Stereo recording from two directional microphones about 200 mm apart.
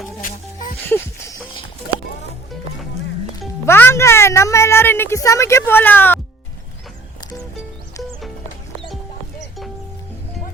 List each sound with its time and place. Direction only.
0.2 s music: 40° left (ahead or behind)
0.9 s music: 15° left (ahead or behind)
3.7 s a woman's voice: 10° left (ahead or behind)